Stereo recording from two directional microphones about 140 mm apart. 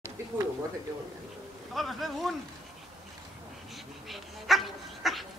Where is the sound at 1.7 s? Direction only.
Centre (ahead or behind).